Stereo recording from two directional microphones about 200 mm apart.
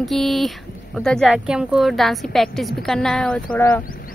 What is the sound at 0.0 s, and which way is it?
Speech, centre (ahead or behind).